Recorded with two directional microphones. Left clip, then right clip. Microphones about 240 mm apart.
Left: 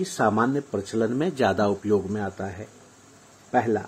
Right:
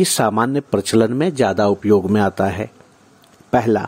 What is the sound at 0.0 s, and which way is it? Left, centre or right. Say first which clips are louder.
Speech: right 6 dB; right.